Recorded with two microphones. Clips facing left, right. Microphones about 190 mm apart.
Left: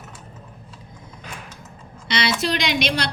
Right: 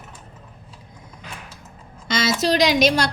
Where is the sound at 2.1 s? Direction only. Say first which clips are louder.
Right 3 dB; 45° right (ahead or behind).